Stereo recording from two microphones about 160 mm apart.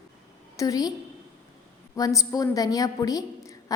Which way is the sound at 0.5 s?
20° left (ahead or behind).